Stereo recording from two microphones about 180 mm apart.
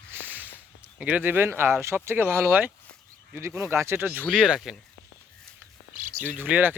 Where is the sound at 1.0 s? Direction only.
10° right (ahead or behind).